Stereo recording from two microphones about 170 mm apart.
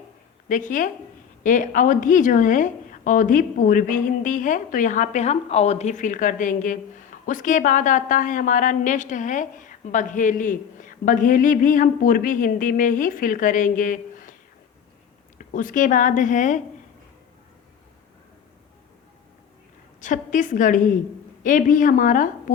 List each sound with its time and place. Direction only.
0.4 s speech: 50° left (ahead or behind)
15.5 s speech: 50° left (ahead or behind)
20.0 s speech: 50° left (ahead or behind)